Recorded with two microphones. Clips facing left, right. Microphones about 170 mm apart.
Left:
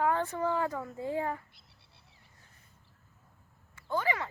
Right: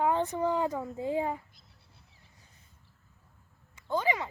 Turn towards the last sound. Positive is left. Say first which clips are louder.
# right 2 dB
turn(degrees=-20)  # may be behind; listen again after turning